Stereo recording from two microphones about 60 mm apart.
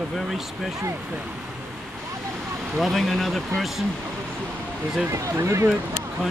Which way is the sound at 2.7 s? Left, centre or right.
Centre.